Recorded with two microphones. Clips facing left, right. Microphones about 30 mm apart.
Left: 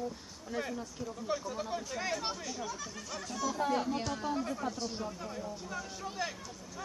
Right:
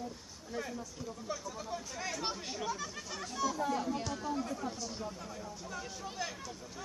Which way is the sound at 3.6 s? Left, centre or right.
Left.